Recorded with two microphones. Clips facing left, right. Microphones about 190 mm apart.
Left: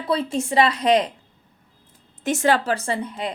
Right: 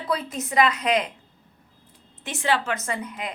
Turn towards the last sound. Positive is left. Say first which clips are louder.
# left 4 dB
turn(degrees=30)  # may be behind; listen again after turning